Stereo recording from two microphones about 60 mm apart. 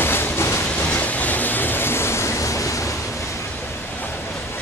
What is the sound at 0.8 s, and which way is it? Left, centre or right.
Vehicle, left.